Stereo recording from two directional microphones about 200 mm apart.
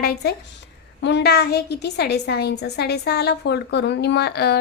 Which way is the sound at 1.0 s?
60° left (ahead or behind).